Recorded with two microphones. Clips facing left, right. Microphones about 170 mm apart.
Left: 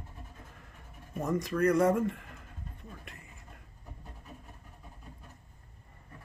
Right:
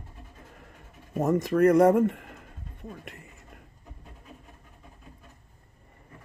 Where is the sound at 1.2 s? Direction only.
50° right (ahead or behind).